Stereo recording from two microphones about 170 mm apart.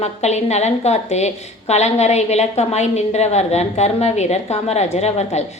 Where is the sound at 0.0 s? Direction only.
40° left (ahead or behind).